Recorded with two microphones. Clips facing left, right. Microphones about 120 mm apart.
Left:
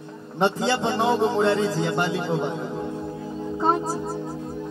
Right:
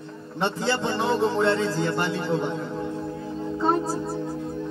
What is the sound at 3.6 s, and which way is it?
Music, 15° left (ahead or behind).